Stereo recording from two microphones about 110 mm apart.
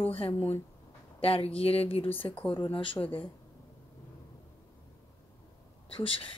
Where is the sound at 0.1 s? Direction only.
55° left (ahead or behind).